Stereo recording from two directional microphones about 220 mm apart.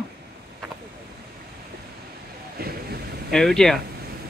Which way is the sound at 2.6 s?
45° right (ahead or behind).